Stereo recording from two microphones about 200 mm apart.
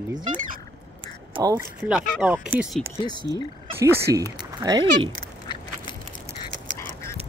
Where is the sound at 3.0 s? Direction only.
20° left (ahead or behind).